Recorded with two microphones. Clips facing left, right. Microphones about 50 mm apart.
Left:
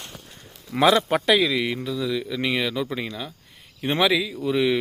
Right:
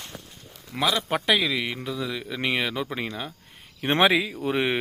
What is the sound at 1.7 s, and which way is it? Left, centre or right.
Speech, right.